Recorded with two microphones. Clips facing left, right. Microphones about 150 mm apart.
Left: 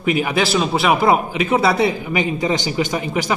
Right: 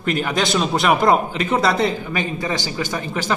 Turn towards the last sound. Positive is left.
turn(degrees=15)  # may be behind; listen again after turning